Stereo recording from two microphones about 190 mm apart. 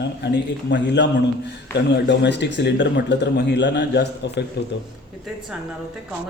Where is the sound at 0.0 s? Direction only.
60° left (ahead or behind).